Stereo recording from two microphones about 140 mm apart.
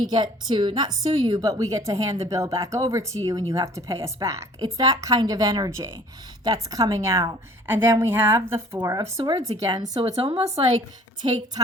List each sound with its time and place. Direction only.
0.0 s a woman's voice: 30° right (ahead or behind)
10.0 s a woman's voice: 45° right (ahead or behind)